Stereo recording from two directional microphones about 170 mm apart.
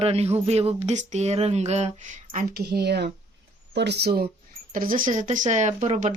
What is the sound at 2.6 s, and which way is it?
Speech, 75° right (ahead or behind).